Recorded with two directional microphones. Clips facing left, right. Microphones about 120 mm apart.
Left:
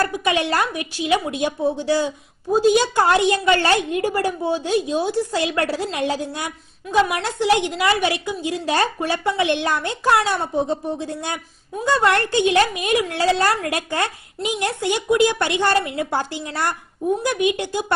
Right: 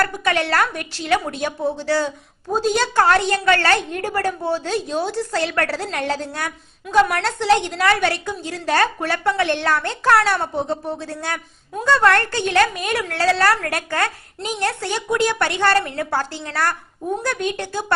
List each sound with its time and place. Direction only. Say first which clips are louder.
0.0 s a woman's voice: even; 15° left (ahead or behind)
6.8 s a woman's voice: right 2 dB; centre (ahead or behind)
7.3 s a woman's voice: right 1 dB; 15° left (ahead or behind)